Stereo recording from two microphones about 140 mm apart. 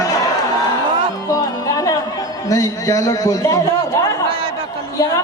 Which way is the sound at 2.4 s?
25° left (ahead or behind).